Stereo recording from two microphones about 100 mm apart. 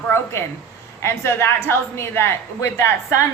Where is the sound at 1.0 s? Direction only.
25° left (ahead or behind).